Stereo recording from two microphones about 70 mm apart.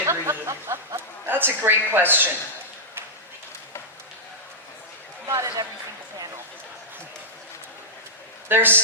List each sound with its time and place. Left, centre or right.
0.0 s snicker: right
0.9 s a man's voice: right
5.3 s a man's voice: right
8.4 s speech: right